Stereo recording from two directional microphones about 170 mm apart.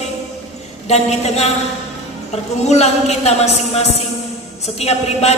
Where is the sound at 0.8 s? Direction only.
40° left (ahead or behind).